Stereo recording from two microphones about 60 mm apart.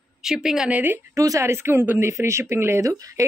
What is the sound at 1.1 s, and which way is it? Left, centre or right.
Speech, right.